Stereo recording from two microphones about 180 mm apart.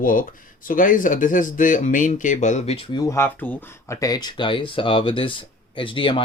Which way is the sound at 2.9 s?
15° left (ahead or behind).